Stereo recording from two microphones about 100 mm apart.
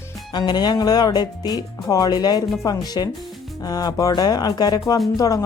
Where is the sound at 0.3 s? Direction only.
45° left (ahead or behind).